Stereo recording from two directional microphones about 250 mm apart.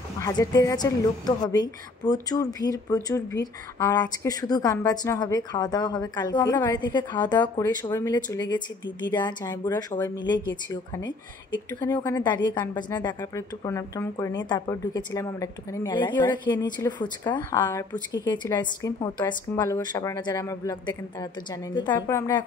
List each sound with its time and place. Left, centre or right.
0.2 s a woman's voice: centre
21.7 s a woman's voice: centre